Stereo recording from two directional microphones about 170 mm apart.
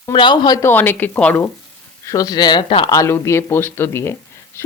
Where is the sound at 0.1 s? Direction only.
30° left (ahead or behind); by 1.5 s 10° left (ahead or behind).